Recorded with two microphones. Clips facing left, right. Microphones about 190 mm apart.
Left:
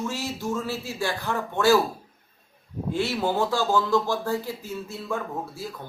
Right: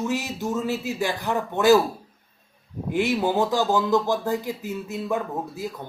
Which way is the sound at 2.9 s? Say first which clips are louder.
Right 3 dB; 15° right (ahead or behind).